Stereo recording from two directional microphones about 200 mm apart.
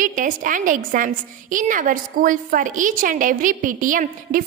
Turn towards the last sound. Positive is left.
turn(degrees=-45)  # may be behind; listen again after turning